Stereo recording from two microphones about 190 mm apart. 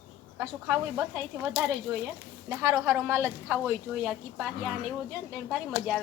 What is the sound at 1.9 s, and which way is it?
Speech, 15° right (ahead or behind).